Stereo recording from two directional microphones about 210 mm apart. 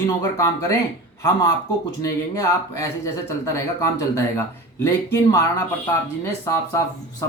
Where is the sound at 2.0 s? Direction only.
15° left (ahead or behind).